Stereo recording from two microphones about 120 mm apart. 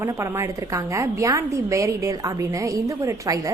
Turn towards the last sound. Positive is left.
turn(degrees=-25)  # may be behind; listen again after turning